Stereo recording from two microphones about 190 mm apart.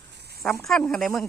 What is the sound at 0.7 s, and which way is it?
Speech, centre (ahead or behind).